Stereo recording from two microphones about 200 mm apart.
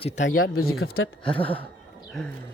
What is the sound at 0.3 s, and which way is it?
Speech, 90° left.